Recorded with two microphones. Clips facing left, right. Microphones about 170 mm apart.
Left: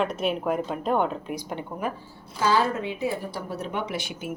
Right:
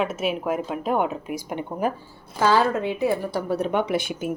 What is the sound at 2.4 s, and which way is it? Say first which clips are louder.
Speech: right 4 dB; 55° right (ahead or behind).